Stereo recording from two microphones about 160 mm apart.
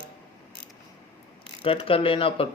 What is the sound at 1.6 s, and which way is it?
Speech, 35° left (ahead or behind).